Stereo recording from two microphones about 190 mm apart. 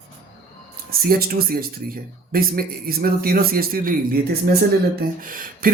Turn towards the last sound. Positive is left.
turn(degrees=-45)  # may be behind; listen again after turning